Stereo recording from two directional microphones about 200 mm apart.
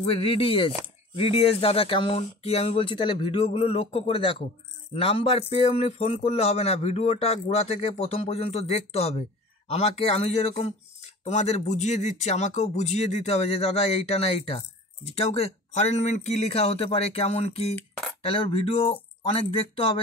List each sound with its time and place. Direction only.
0.1 s speech: 30° left (ahead or behind)